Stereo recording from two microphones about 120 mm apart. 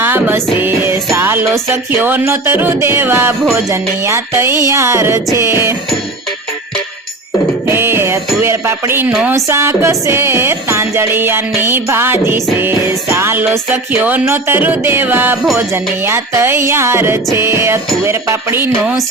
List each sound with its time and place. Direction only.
0.0 s music: 15° right (ahead or behind)
7.7 s music: 20° right (ahead or behind)